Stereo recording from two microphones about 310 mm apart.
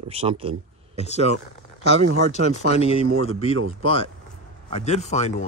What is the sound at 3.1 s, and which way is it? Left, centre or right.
Speech, right.